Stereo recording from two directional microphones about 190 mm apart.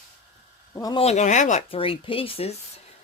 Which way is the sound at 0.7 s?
20° left (ahead or behind).